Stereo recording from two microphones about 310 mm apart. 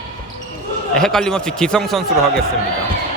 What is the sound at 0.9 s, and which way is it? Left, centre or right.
Speech, centre.